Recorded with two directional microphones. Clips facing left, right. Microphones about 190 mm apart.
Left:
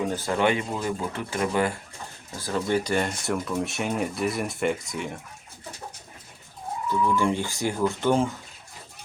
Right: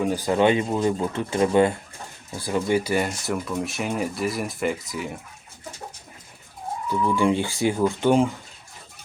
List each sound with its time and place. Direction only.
0.1 s speech: 15° right (ahead or behind)
2.4 s speech: 10° right (ahead or behind)
7.2 s speech: 15° right (ahead or behind)